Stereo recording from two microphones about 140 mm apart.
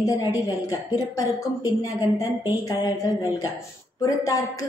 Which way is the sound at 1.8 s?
25° left (ahead or behind).